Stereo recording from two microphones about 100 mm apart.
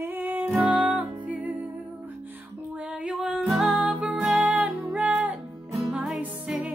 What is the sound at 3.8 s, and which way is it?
Music, 15° right (ahead or behind).